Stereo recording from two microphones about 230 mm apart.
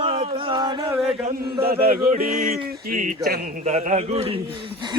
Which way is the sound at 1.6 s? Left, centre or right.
Right.